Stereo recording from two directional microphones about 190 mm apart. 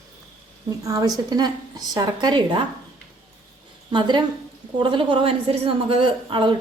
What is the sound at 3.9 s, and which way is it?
A woman's voice, 25° right (ahead or behind).